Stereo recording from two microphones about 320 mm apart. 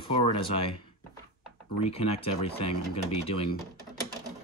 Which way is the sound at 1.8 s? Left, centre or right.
Centre.